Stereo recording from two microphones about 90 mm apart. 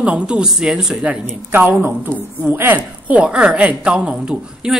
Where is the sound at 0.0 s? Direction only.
15° right (ahead or behind).